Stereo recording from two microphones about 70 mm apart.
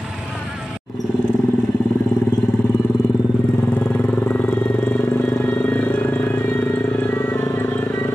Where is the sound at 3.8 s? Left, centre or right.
Centre.